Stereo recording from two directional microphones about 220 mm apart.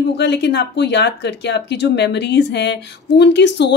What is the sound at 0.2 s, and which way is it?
A woman's voice, 50° left (ahead or behind).